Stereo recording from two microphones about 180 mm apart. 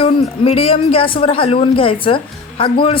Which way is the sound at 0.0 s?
35° left (ahead or behind).